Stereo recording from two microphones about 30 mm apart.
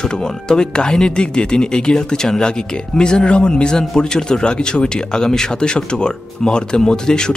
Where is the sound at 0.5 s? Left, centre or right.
Left.